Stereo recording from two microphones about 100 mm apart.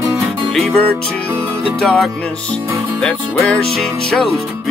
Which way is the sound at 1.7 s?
5° left (ahead or behind).